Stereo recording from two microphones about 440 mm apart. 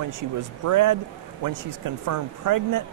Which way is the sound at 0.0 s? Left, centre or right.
Right.